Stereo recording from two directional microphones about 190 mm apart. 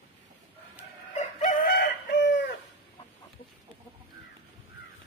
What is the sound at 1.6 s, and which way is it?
Chicken, 55° left (ahead or behind).